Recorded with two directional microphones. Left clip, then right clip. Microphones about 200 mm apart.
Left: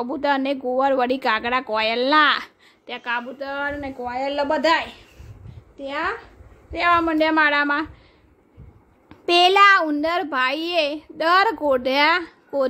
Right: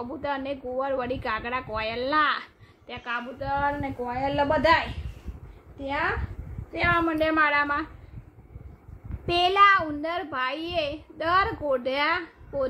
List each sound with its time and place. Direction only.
0.0 s a woman's voice: 55° left (ahead or behind)
5.8 s a child's voice: 55° left (ahead or behind)
9.2 s a child's voice: 55° left (ahead or behind)